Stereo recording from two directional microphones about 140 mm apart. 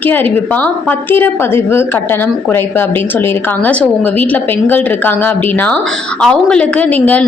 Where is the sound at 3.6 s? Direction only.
10° left (ahead or behind).